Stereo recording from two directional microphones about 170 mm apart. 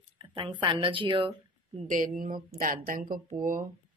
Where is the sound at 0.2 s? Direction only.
30° right (ahead or behind).